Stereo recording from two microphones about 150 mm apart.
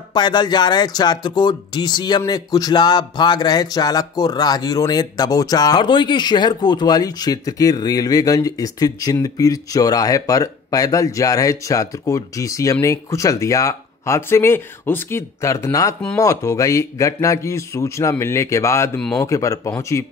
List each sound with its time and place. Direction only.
0.1 s speech: 30° left (ahead or behind)